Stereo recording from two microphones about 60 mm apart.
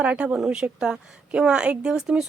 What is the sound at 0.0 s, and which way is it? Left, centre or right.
A woman's voice, right.